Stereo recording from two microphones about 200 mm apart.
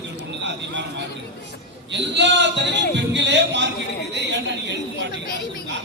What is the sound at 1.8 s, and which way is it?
A man's voice, 60° right (ahead or behind).